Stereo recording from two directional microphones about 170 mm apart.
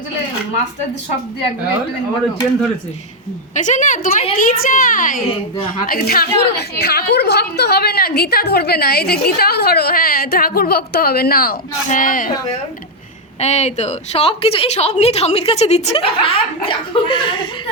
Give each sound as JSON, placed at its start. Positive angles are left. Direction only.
{"t": 3.5, "sound": "a woman's voice", "side_deg": 45}
{"t": 13.4, "sound": "a woman's voice", "side_deg": 40}